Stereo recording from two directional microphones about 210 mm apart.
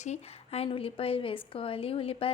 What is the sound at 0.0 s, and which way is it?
Speech, 30° left (ahead or behind).